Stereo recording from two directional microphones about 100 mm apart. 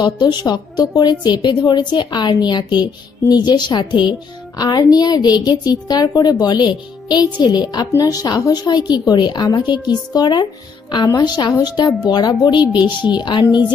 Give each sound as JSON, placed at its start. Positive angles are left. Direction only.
{"t": 0.0, "sound": "a woman's voice", "side_deg": 45}